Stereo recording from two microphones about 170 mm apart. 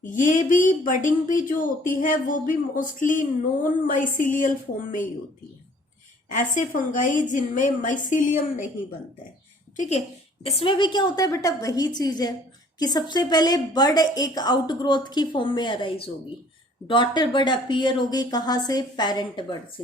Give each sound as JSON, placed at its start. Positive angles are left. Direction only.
{"t": 0.0, "sound": "a woman's voice", "side_deg": 50}
{"t": 6.3, "sound": "a woman's voice", "side_deg": 50}
{"t": 9.7, "sound": "a woman's voice", "side_deg": 45}
{"t": 10.4, "sound": "a woman's voice", "side_deg": 35}